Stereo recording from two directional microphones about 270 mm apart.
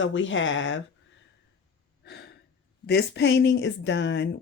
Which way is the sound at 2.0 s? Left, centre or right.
Left.